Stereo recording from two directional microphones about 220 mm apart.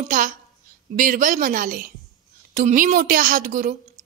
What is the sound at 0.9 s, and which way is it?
A woman's voice, 40° right (ahead or behind).